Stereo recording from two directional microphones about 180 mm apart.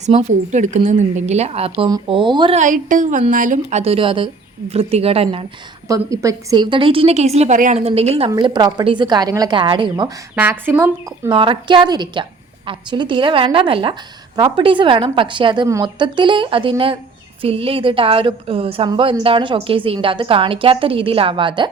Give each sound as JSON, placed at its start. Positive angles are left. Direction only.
{"t": 0.0, "sound": "a woman's voice", "side_deg": -35}
{"t": 2.6, "sound": "a woman's voice", "side_deg": -45}
{"t": 5.9, "sound": "a woman's voice", "side_deg": -20}
{"t": 10.3, "sound": "speech", "side_deg": -10}
{"t": 11.3, "sound": "a woman's voice", "side_deg": -30}